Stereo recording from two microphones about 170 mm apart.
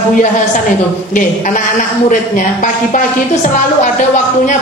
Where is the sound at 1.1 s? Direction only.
50° left (ahead or behind).